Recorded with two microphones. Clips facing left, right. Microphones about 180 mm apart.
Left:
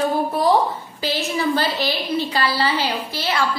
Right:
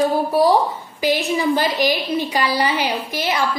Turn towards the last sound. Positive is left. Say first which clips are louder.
# right 1 dB
turn(degrees=-15)  # may be behind; listen again after turning